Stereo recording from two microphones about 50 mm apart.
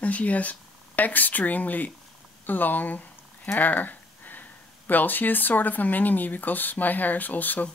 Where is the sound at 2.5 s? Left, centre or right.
Left.